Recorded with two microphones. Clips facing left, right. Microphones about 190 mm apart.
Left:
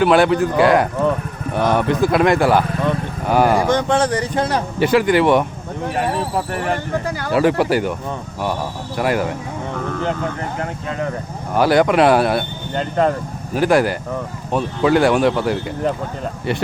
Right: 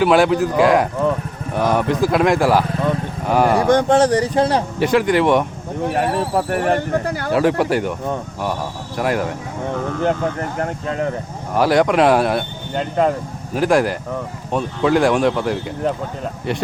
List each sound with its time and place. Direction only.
0.0 s speech: centre (ahead or behind)
3.7 s speech: 45° right (ahead or behind); by 4.6 s 30° right (ahead or behind)
4.8 s speech: centre (ahead or behind)
5.9 s speech: 50° right (ahead or behind)
7.3 s speech: centre (ahead or behind)
9.0 s speech: centre (ahead or behind)
11.5 s speech: centre (ahead or behind)